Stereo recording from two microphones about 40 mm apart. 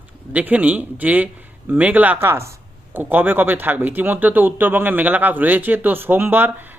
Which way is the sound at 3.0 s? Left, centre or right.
Right.